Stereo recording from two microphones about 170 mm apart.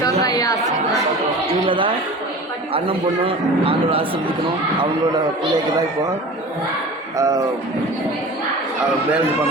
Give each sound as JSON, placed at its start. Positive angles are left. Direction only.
{"t": 0.0, "sound": "chatter", "side_deg": 20}
{"t": 1.5, "sound": "a man's voice", "side_deg": -30}
{"t": 7.2, "sound": "speech", "side_deg": -20}